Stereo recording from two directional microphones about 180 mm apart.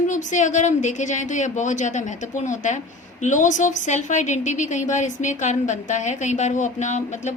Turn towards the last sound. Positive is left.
turn(degrees=40)  # may be behind; listen again after turning